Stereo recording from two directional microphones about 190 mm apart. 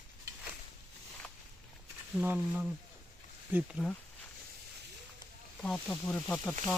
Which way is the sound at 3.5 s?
Centre (ahead or behind).